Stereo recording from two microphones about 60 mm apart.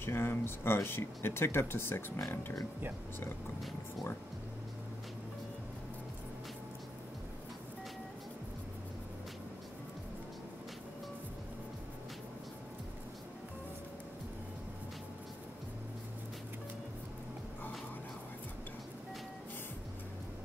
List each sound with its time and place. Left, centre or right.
0.0 s speech: left